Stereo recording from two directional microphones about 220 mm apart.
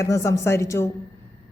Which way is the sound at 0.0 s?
15° left (ahead or behind).